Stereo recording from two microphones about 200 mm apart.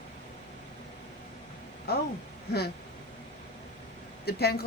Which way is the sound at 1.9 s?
50° left (ahead or behind).